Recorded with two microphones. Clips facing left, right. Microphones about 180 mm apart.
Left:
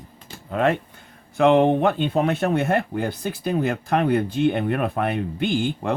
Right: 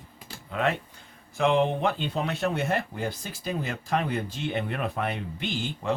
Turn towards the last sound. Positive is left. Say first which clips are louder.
# left 9 dB
turn(degrees=55)  # may be behind; listen again after turning